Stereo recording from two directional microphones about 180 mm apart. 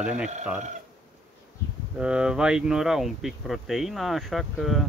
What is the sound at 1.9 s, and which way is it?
Speech, 5° right (ahead or behind).